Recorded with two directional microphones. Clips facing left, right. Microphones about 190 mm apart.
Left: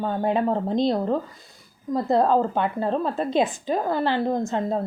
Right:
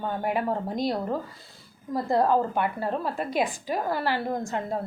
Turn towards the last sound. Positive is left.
turn(degrees=20)  # may be behind; listen again after turning